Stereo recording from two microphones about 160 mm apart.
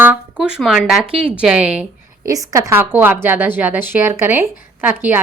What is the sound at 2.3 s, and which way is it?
A woman's voice, 20° right (ahead or behind).